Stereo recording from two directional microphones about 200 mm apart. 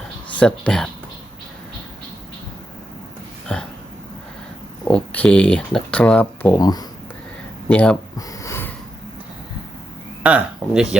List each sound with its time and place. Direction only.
0.3 s speech: 5° left (ahead or behind)
4.9 s speech: 5° left (ahead or behind)
6.6 s speech: 20° left (ahead or behind)
7.7 s speech: 5° left (ahead or behind)
8.3 s a sound: 15° left (ahead or behind)
10.2 s speech: 5° right (ahead or behind)